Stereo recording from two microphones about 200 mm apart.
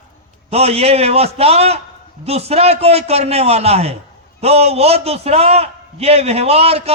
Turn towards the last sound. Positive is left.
turn(degrees=-30)  # may be behind; listen again after turning